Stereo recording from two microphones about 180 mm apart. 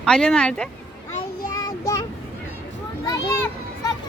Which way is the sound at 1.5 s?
20° left (ahead or behind).